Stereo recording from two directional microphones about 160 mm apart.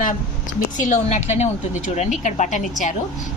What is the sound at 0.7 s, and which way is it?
A woman's voice, 50° left (ahead or behind).